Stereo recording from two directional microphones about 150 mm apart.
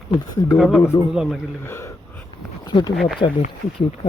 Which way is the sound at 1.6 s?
15° left (ahead or behind).